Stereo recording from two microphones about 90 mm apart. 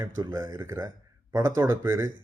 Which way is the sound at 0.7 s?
35° right (ahead or behind).